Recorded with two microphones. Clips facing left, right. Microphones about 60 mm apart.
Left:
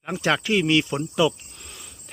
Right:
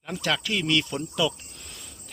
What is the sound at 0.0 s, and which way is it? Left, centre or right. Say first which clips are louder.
Speech: left 5 dB; left.